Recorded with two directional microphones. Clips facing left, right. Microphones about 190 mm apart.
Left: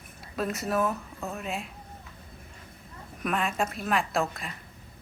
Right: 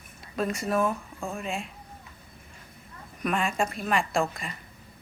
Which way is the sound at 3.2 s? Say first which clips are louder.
Right 1 dB; centre (ahead or behind).